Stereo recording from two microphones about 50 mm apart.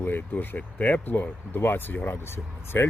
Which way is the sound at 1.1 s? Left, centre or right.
Left.